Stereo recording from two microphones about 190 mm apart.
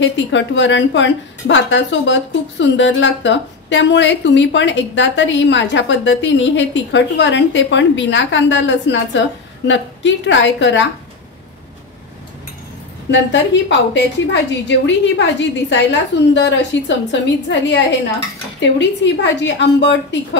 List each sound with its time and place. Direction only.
0.0 s a woman's voice: 75° left (ahead or behind)
13.1 s a woman's voice: 70° left (ahead or behind)